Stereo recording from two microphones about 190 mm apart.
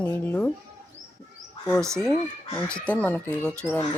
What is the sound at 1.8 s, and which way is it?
Speech, 15° right (ahead or behind).